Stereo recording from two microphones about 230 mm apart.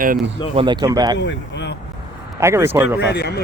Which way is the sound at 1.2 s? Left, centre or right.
Left.